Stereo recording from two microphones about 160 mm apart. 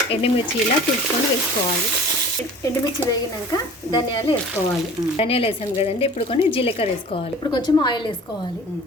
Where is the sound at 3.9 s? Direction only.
30° left (ahead or behind).